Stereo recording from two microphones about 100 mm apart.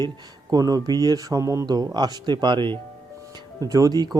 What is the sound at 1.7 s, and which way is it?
Speech, 45° right (ahead or behind).